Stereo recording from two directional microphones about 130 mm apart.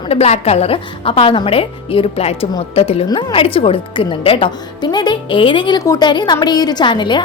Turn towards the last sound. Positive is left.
turn(degrees=35)  # may be behind; listen again after turning